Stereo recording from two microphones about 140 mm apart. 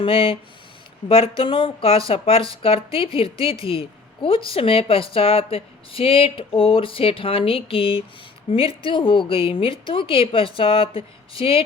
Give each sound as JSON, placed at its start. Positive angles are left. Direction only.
{"t": 0.0, "sound": "speech", "side_deg": 40}